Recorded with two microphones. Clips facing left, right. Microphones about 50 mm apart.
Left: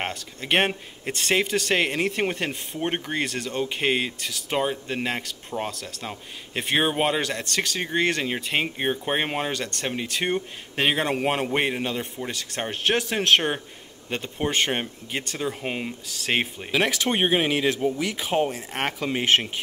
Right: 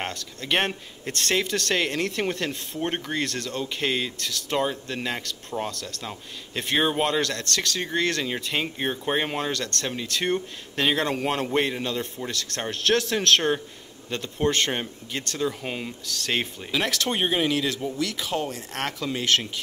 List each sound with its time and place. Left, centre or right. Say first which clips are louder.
0.0 s speech: left 1 dB; centre